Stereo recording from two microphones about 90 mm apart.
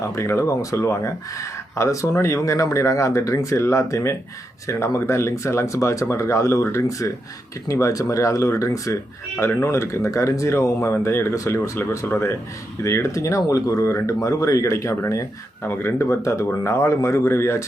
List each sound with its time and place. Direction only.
0.2 s speech: 30° left (ahead or behind)